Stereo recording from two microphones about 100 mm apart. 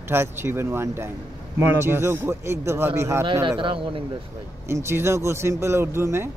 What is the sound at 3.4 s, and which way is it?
Speech, 55° right (ahead or behind).